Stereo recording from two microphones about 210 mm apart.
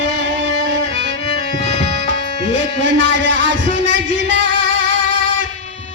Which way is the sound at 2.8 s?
60° right (ahead or behind).